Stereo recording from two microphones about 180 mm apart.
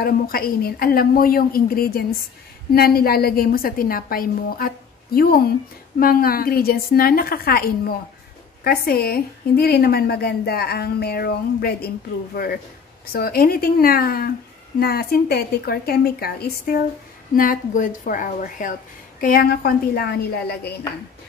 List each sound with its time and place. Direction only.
0.0 s a woman's voice: 55° left (ahead or behind)
13.0 s a woman's voice: 55° left (ahead or behind)